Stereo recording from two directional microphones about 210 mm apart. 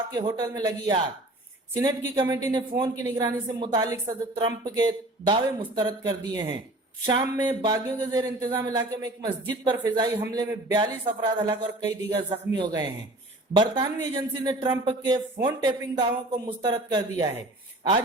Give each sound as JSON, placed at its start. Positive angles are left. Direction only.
{"t": 0.1, "sound": "a man's voice", "side_deg": -20}